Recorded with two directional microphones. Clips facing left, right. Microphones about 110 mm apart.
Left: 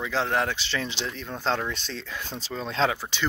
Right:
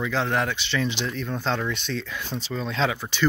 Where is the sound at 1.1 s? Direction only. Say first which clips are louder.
Right 1 dB; 25° left (ahead or behind).